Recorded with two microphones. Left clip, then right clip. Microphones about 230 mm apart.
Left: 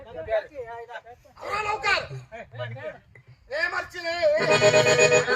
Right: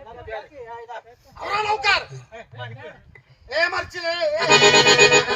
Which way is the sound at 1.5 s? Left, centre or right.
Right.